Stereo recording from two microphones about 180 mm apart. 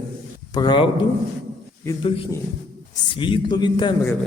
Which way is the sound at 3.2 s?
25° left (ahead or behind).